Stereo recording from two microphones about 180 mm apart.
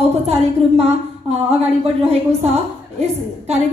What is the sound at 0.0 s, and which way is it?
Speech, 35° right (ahead or behind).